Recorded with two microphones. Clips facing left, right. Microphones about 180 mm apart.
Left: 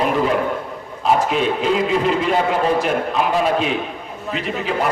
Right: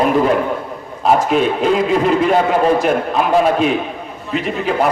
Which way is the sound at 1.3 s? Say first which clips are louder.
Right 4 dB; 50° right (ahead or behind).